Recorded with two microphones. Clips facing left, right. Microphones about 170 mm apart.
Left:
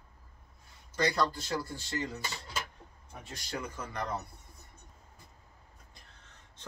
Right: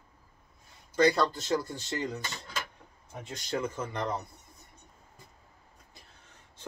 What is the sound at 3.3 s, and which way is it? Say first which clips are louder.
Speech: right 7 dB; 25° right (ahead or behind).